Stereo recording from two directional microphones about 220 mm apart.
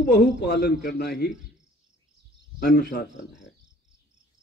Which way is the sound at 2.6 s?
50° left (ahead or behind).